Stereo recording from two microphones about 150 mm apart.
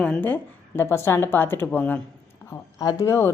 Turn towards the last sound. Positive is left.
turn(degrees=20)  # may be behind; listen again after turning